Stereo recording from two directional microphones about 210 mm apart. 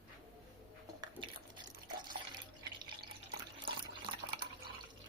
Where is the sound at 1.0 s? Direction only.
20° right (ahead or behind).